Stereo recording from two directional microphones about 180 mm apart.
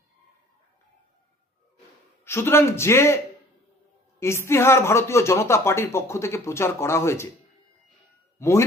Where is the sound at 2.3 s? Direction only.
15° left (ahead or behind).